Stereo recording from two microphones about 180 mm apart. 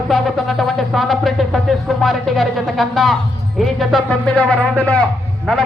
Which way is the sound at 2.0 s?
Centre (ahead or behind).